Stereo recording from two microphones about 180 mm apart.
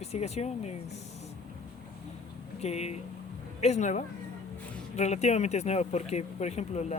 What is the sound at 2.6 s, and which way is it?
Speech, 35° left (ahead or behind).